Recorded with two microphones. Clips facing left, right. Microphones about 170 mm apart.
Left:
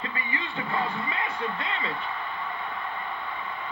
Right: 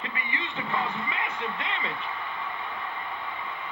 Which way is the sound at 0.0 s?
35° left (ahead or behind).